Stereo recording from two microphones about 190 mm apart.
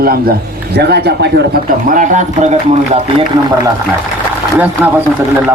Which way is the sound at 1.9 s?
45° right (ahead or behind).